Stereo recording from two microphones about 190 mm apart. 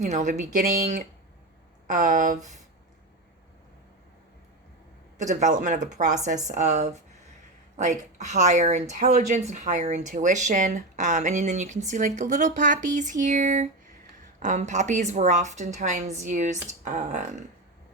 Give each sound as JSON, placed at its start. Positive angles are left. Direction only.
{"t": 0.0, "sound": "speech", "side_deg": -40}
{"t": 5.3, "sound": "speech", "side_deg": -40}